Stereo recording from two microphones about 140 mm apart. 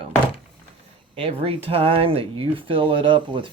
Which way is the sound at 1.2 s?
45° right (ahead or behind).